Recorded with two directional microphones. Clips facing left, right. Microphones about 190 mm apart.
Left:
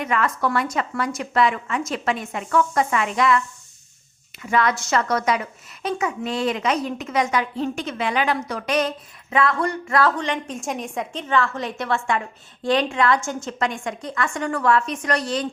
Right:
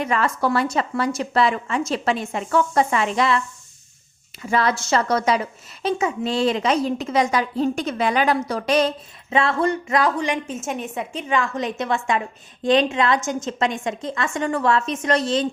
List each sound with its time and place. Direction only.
0.0 s a woman's voice: 30° right (ahead or behind)
4.4 s a woman's voice: 30° right (ahead or behind)